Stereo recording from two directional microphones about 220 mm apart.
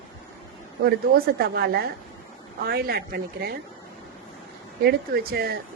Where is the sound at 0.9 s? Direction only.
45° right (ahead or behind).